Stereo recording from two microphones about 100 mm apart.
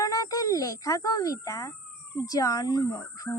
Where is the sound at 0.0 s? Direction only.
35° left (ahead or behind).